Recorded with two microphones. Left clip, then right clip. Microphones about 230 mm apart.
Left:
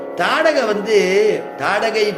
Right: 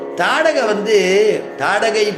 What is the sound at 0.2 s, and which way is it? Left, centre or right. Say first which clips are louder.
Speech: right 1 dB; centre.